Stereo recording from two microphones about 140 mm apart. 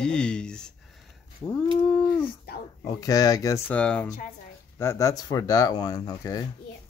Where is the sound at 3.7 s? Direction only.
10° left (ahead or behind).